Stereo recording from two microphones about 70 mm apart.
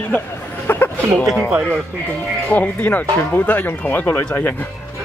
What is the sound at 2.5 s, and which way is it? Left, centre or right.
Speech, left.